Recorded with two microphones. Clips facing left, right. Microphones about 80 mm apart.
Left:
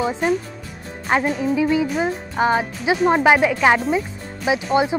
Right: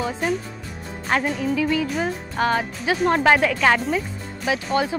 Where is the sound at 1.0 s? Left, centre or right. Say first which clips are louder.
Left 3 dB; centre.